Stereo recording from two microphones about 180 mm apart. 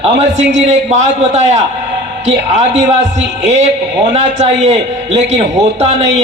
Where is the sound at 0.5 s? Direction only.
40° right (ahead or behind).